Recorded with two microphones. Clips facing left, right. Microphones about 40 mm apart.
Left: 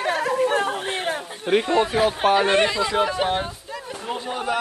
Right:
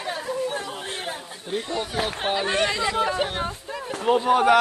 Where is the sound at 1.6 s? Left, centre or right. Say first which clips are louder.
Left 8 dB; left.